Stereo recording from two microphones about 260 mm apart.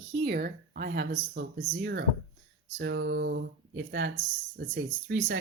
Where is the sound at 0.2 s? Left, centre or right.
Right.